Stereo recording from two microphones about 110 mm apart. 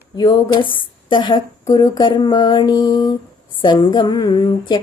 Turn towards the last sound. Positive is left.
turn(degrees=45)  # may be behind; listen again after turning